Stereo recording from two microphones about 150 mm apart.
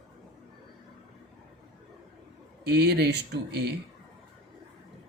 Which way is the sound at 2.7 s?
90° right.